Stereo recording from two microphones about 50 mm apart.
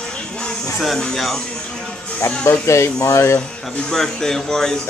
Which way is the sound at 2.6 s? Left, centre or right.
Left.